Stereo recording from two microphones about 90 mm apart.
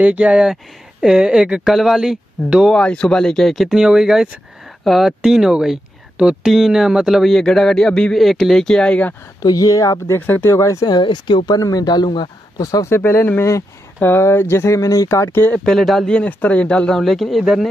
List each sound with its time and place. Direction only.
0.0 s speech: 15° right (ahead or behind)
2.7 s speech: 10° left (ahead or behind)
9.4 s speech: 40° left (ahead or behind)
10.0 s speech: 25° left (ahead or behind)
10.9 s speech: 60° left (ahead or behind)
12.8 s speech: 25° left (ahead or behind)
15.5 s speech: 5° left (ahead or behind)
16.2 s speech: 15° left (ahead or behind)
17.0 s speech: centre (ahead or behind)